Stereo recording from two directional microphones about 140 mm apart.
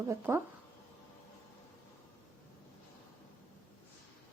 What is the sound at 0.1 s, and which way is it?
Speech, 15° right (ahead or behind).